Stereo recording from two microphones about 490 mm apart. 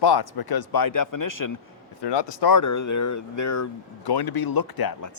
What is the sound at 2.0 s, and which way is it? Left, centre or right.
Speech, left.